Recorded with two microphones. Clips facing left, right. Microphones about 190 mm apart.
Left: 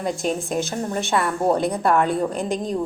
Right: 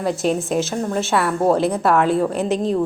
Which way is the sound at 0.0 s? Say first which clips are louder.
Right 4 dB; 5° right (ahead or behind).